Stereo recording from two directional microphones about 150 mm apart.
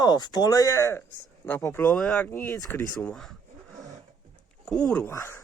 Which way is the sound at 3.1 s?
Centre (ahead or behind).